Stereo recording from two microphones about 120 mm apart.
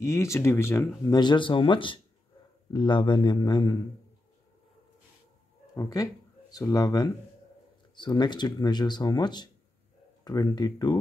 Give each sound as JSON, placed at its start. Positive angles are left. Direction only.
{"t": 0.0, "sound": "speech", "side_deg": 25}
{"t": 1.1, "sound": "speech", "side_deg": 40}
{"t": 5.8, "sound": "speech", "side_deg": 30}